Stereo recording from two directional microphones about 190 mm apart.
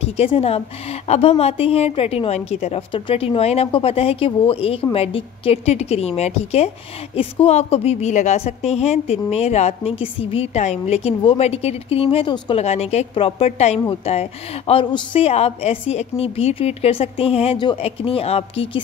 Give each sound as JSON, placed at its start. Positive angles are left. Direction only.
{"t": 0.0, "sound": "a woman's voice", "side_deg": 30}